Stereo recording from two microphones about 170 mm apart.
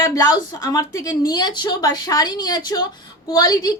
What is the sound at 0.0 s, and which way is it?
A woman's voice, 25° left (ahead or behind).